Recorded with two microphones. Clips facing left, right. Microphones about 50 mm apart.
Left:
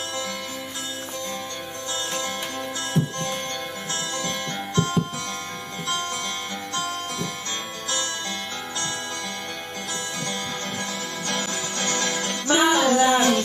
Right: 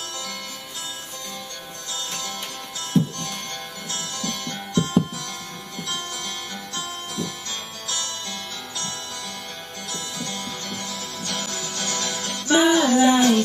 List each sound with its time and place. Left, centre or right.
2.9 s music: left
6.7 s music: left
11.2 s music: left